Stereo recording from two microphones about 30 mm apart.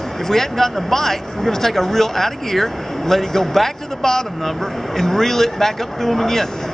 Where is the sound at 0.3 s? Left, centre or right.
Centre.